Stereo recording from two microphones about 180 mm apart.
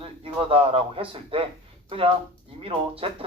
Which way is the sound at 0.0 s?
30° right (ahead or behind).